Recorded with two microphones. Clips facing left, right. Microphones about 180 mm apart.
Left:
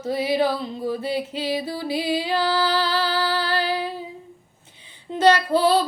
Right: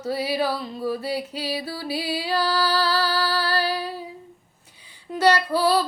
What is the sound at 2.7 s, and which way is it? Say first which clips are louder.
Music: even; 35° right (ahead or behind).